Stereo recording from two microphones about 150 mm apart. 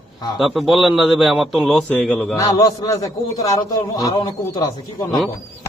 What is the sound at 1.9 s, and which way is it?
Speech, 10° left (ahead or behind).